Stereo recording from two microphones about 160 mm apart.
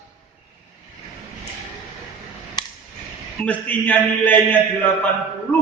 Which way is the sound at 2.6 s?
25° left (ahead or behind).